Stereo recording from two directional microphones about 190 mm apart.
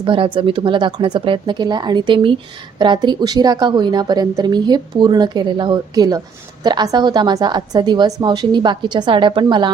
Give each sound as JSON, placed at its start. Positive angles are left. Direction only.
{"t": 0.0, "sound": "a woman's voice", "side_deg": -25}